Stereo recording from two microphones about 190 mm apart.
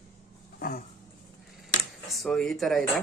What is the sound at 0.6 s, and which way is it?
Dog, 50° left (ahead or behind).